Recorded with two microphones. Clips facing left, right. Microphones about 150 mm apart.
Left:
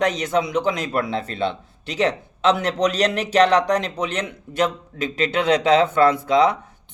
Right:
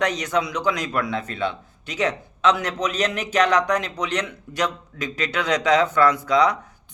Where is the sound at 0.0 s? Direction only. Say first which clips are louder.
Left 2 dB; 25° left (ahead or behind).